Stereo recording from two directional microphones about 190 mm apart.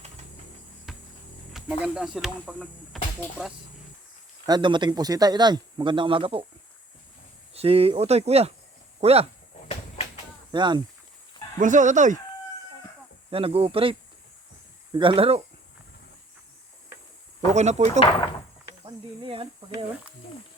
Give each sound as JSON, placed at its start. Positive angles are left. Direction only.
{"t": 0.9, "sound": "a sound", "side_deg": 0}
{"t": 1.5, "sound": "speech", "side_deg": 0}
{"t": 4.4, "sound": "speech", "side_deg": -25}
{"t": 7.5, "sound": "speech", "side_deg": -30}
{"t": 9.6, "sound": "a sound", "side_deg": 35}
{"t": 10.5, "sound": "speech", "side_deg": -25}
{"t": 11.6, "sound": "speech", "side_deg": -40}
{"t": 13.3, "sound": "speech", "side_deg": -30}
{"t": 14.9, "sound": "speech", "side_deg": -30}
{"t": 17.5, "sound": "speech", "side_deg": -35}
{"t": 18.9, "sound": "speech", "side_deg": -25}